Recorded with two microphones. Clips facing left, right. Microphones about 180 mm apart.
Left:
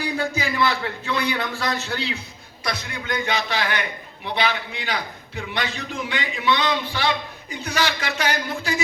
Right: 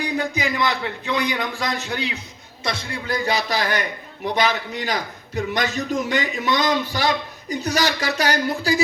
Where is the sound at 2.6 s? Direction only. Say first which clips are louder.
Right 2 dB; 25° right (ahead or behind).